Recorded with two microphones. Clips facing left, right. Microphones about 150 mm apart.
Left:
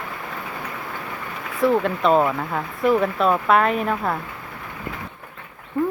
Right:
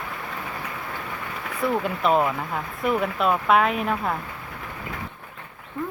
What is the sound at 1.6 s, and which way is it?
Speech, 5° right (ahead or behind).